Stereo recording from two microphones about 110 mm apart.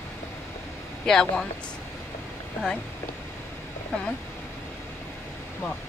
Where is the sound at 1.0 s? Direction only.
5° left (ahead or behind).